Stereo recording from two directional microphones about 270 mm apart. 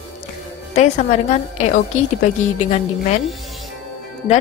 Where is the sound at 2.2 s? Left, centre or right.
Left.